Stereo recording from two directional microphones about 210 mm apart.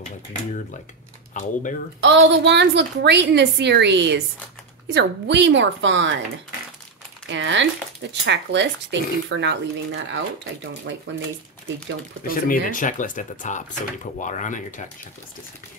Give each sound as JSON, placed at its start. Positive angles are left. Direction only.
{"t": 1.3, "sound": "speech", "side_deg": 35}
{"t": 2.0, "sound": "speech", "side_deg": -60}
{"t": 7.2, "sound": "speech", "side_deg": -60}
{"t": 12.3, "sound": "speech", "side_deg": 40}